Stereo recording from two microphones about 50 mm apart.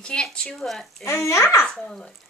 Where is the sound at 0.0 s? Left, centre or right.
Centre.